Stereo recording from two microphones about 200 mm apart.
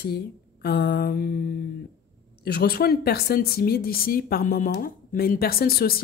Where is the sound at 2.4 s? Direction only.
50° left (ahead or behind).